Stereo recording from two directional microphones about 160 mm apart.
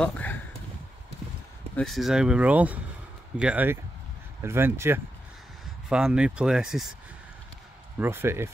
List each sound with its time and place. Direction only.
0.0 s speech: 10° left (ahead or behind)
1.8 s speech: centre (ahead or behind)
8.0 s speech: 15° right (ahead or behind)